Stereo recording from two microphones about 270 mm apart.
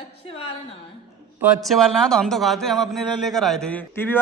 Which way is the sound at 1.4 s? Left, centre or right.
Centre.